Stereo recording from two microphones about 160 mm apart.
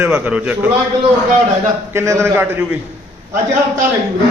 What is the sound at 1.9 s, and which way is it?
Speech, 15° right (ahead or behind).